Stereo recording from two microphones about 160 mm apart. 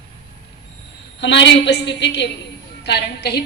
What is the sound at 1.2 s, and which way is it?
A woman's voice, 90° left.